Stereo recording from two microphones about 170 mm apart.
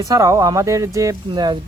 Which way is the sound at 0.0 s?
20° right (ahead or behind).